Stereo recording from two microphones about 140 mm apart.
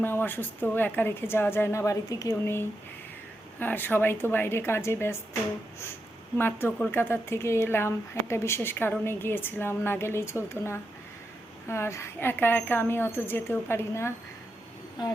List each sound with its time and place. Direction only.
0.0 s speech: 15° left (ahead or behind)
6.3 s speech: 15° left (ahead or behind)